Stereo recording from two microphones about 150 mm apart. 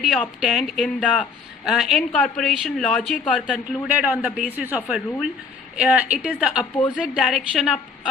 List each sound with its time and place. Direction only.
0.0 s speech: 5° right (ahead or behind)
1.0 s a man's voice: 10° left (ahead or behind)
1.6 s a man's voice: 5° right (ahead or behind)